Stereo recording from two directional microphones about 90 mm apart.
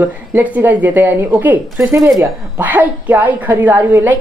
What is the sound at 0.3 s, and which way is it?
Speech, 20° right (ahead or behind).